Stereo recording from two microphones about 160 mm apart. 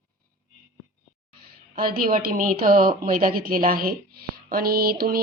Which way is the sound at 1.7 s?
65° right (ahead or behind).